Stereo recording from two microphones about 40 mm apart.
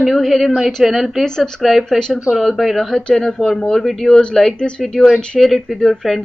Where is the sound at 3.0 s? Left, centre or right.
Centre.